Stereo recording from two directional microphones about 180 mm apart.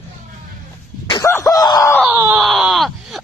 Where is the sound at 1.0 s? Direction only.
25° left (ahead or behind).